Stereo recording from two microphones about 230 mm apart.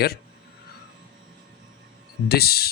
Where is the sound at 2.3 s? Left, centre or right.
Left.